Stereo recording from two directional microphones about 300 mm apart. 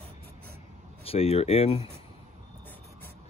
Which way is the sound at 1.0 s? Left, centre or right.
Centre.